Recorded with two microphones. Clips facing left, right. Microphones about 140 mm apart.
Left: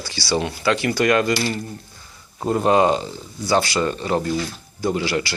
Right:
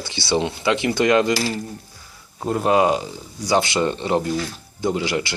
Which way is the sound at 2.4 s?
Centre (ahead or behind).